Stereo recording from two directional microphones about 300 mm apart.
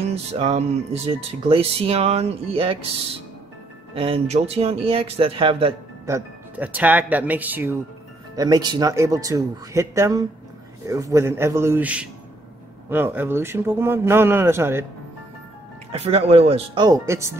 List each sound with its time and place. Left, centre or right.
0.0 s speech: right
3.9 s speech: centre
15.9 s speech: centre